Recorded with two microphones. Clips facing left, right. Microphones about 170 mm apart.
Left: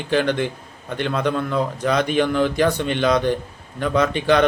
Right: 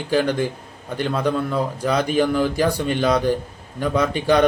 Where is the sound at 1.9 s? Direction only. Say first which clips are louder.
Even; 35° right (ahead or behind).